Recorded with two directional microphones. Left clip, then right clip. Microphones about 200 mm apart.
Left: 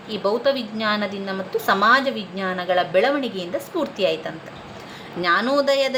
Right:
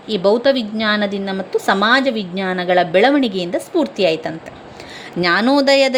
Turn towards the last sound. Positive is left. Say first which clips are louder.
# right 6 dB
turn(degrees=-30)  # may be behind; listen again after turning